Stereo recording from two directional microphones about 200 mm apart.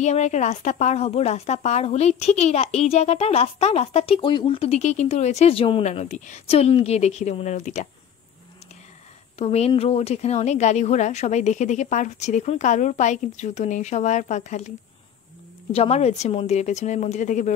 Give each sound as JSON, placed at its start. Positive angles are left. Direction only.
{"t": 0.0, "sound": "a woman's voice", "side_deg": 35}
{"t": 9.4, "sound": "a woman's voice", "side_deg": 30}
{"t": 15.7, "sound": "a woman's voice", "side_deg": 30}